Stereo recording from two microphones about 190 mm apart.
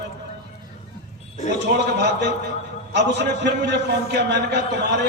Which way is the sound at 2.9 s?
65° right (ahead or behind).